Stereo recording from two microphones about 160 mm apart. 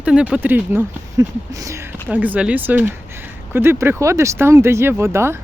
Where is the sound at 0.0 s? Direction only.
5° right (ahead or behind).